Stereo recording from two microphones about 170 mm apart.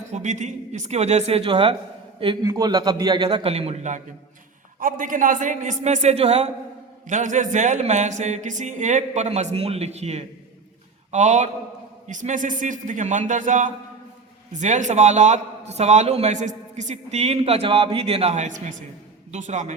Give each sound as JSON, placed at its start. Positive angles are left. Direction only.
{"t": 0.1, "sound": "a man's voice", "side_deg": -45}
{"t": 3.2, "sound": "a man's voice", "side_deg": -35}
{"t": 4.8, "sound": "speech", "side_deg": -55}
{"t": 7.1, "sound": "a man's voice", "side_deg": -45}